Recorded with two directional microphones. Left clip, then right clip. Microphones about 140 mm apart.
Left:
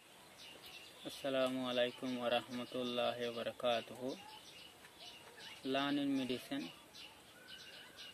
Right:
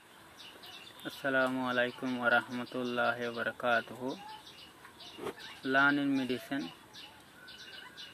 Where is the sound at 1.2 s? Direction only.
20° left (ahead or behind).